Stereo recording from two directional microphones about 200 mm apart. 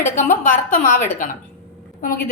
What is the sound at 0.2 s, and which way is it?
A woman's voice, 40° left (ahead or behind).